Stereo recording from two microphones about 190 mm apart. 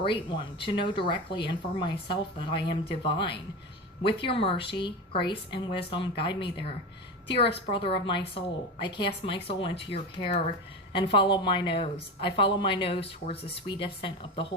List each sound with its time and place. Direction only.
0.0 s speech: 25° left (ahead or behind)